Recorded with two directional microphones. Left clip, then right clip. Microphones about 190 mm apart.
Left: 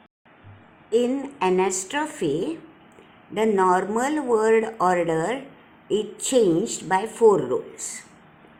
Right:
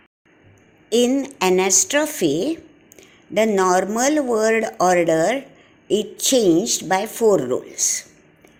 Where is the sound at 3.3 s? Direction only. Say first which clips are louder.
Right 3 dB; 30° right (ahead or behind).